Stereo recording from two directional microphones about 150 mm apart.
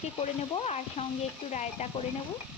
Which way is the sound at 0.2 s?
45° left (ahead or behind).